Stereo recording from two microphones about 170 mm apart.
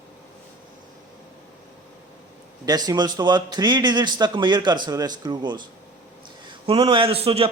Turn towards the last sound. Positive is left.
turn(degrees=-35)  # may be behind; listen again after turning